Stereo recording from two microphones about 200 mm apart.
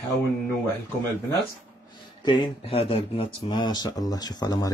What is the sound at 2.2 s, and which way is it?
Speech, 25° left (ahead or behind).